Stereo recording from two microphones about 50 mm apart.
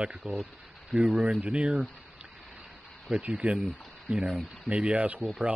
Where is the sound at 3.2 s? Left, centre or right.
Right.